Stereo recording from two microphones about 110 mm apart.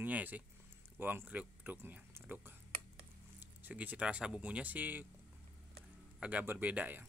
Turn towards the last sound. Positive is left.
turn(degrees=-15)  # may be behind; listen again after turning